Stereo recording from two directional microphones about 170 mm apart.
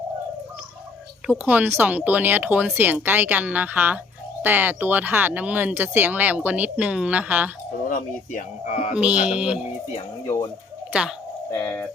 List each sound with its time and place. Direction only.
1.3 s speech: 10° right (ahead or behind)
7.9 s speech: 50° left (ahead or behind)
9.0 s speech: 5° right (ahead or behind)
11.5 s speech: 10° left (ahead or behind)